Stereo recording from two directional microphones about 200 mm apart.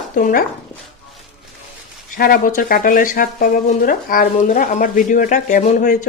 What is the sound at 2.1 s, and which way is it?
Speech, 45° left (ahead or behind).